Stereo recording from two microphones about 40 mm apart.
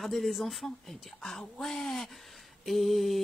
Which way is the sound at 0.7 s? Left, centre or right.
Centre.